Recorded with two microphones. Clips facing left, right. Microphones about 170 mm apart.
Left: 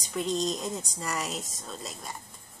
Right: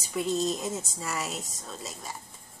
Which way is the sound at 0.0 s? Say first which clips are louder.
Right 1 dB; 5° right (ahead or behind).